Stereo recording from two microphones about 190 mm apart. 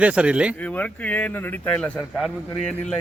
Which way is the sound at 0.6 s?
10° left (ahead or behind).